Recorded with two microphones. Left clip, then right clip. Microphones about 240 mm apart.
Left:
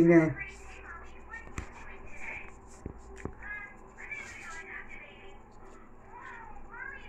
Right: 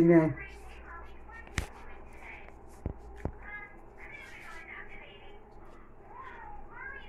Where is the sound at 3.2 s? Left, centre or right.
Right.